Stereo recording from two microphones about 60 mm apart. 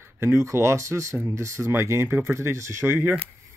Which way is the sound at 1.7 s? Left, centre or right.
Right.